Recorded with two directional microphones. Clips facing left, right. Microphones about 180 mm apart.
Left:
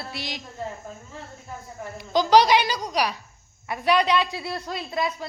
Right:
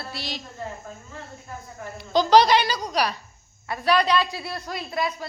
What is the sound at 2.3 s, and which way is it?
A woman's voice, 15° left (ahead or behind).